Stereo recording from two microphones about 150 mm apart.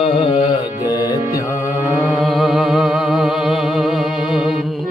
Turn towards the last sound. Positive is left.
turn(degrees=0)  # may be behind; listen again after turning